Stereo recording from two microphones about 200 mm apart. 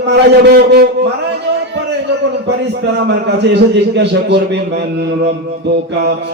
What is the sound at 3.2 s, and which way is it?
Mantra, 60° right (ahead or behind).